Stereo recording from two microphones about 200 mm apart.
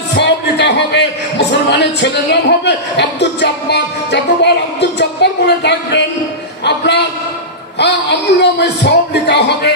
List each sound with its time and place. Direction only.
0.1 s a man's voice: 60° left (ahead or behind)
6.6 s a sound: 60° left (ahead or behind)
7.8 s a man's voice: 60° left (ahead or behind)